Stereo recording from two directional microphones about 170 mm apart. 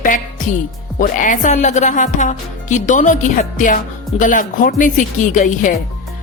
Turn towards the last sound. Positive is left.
turn(degrees=50)  # may be behind; listen again after turning